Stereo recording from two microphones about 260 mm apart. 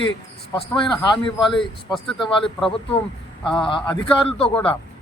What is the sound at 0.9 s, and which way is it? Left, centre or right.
A man's voice, centre.